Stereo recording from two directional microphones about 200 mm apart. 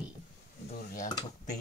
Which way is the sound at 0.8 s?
45° left (ahead or behind).